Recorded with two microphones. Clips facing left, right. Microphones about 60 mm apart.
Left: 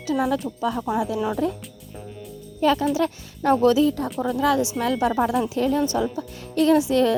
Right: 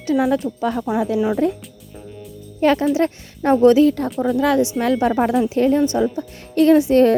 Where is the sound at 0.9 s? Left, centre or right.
Right.